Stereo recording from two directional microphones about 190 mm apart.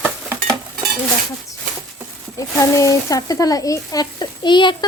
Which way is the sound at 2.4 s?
15° left (ahead or behind).